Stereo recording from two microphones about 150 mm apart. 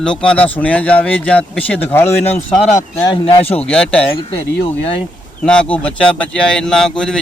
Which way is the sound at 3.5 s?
5° left (ahead or behind).